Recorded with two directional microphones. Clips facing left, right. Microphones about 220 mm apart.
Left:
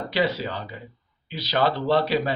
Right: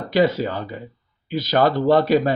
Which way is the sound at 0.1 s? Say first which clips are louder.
Right 7 dB; 45° right (ahead or behind).